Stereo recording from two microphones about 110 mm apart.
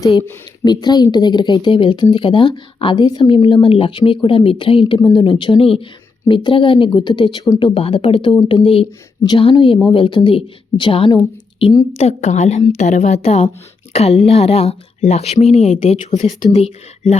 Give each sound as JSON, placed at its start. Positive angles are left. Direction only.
{"t": 0.6, "sound": "speech", "side_deg": 40}
{"t": 7.6, "sound": "speech", "side_deg": 55}
{"t": 11.9, "sound": "a woman's voice", "side_deg": 80}